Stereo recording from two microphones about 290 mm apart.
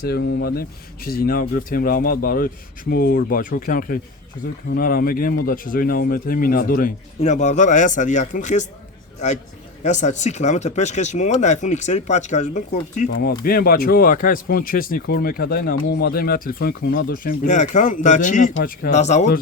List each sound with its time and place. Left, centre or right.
0.1 s speech: left
9.8 s speech: left